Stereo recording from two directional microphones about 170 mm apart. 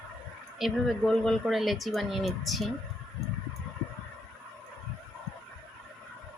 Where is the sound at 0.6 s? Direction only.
Centre (ahead or behind).